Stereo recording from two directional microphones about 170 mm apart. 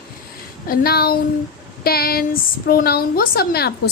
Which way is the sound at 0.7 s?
60° left (ahead or behind).